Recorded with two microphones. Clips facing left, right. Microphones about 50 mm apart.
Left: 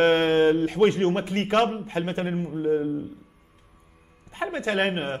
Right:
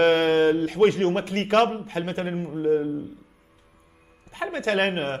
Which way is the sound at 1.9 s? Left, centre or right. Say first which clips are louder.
Left 1 dB; centre.